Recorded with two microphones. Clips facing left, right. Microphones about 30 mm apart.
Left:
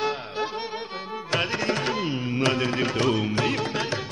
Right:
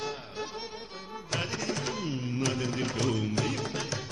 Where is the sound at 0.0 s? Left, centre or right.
Left.